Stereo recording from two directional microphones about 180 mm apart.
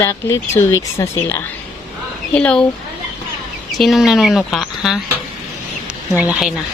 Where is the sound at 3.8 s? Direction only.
Centre (ahead or behind).